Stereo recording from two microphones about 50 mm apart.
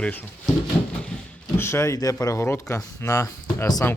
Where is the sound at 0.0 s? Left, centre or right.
Left.